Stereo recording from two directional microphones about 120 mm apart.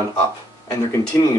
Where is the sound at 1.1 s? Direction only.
25° left (ahead or behind).